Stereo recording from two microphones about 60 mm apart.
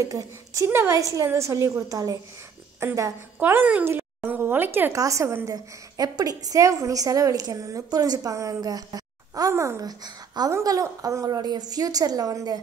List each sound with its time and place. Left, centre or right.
0.0 s a woman's voice: right
0.7 s a woman's voice: right
1.2 s a woman's voice: right
1.9 s a woman's voice: right
2.8 s a woman's voice: right
3.3 s speech: right
3.8 s a sound: right
4.9 s a woman's voice: right
5.4 s a woman's voice: right
9.5 s a woman's voice: right
10.6 s a woman's voice: right